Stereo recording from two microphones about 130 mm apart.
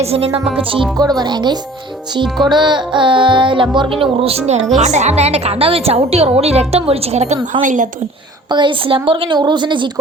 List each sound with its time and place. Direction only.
0.0 s a woman's voice: 50° right (ahead or behind)
0.9 s music: 30° right (ahead or behind); by 4.6 s 55° right (ahead or behind)
4.8 s a woman's voice: 60° right (ahead or behind)
7.6 s a woman's voice: 80° right
8.4 s music: 35° right (ahead or behind)